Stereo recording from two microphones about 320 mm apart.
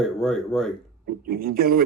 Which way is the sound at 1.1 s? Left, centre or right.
Right.